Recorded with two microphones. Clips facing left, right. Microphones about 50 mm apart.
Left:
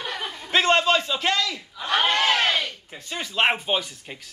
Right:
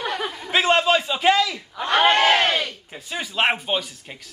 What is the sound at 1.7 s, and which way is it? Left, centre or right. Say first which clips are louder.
Speech: right 5 dB; right.